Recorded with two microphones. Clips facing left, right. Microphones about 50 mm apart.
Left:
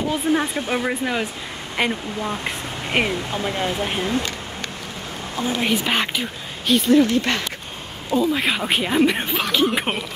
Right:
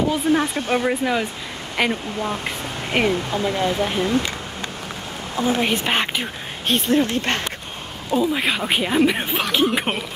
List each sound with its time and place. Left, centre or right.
0.3 s speech: centre
2.9 s speech: left
3.4 s speech: left
5.3 s a woman's voice: right
5.7 s speech: centre
6.7 s speech: right
8.1 s speech: centre